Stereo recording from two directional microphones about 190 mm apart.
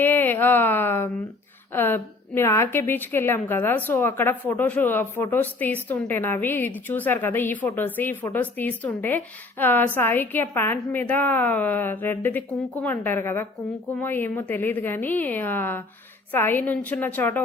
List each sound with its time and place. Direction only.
0.0 s a woman's voice: 10° left (ahead or behind)